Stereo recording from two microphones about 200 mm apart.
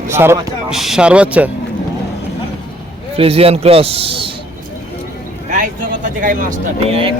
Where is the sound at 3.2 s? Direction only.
30° right (ahead or behind).